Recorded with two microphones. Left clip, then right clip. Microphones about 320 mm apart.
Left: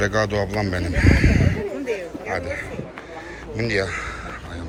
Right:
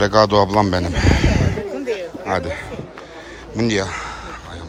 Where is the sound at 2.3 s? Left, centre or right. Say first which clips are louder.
Right 3 dB; centre.